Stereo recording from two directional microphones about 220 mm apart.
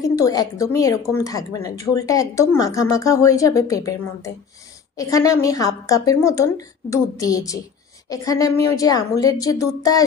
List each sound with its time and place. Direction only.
0.0 s a woman's voice: 15° left (ahead or behind)